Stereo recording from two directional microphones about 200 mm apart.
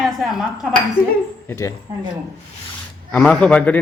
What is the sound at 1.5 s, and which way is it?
Speech, 15° left (ahead or behind).